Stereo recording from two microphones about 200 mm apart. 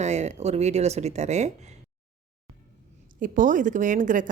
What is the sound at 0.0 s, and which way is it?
A woman's voice, 35° right (ahead or behind).